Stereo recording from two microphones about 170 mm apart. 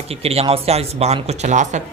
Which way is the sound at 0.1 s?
35° right (ahead or behind).